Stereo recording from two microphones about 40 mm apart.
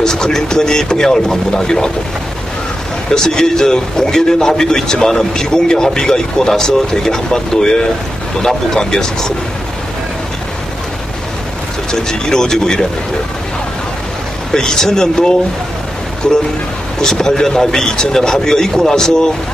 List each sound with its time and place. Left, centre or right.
0.0 s a man's voice: centre
3.1 s a man's voice: centre
11.9 s a man's voice: centre
14.5 s a man's voice: centre
17.0 s a man's voice: centre